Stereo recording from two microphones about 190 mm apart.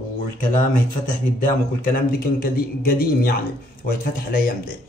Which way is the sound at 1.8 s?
50° left (ahead or behind).